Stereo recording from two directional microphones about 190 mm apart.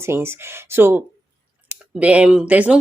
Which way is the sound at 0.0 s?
15° right (ahead or behind).